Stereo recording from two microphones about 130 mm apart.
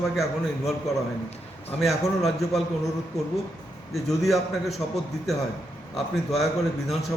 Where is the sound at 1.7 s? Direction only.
Centre (ahead or behind).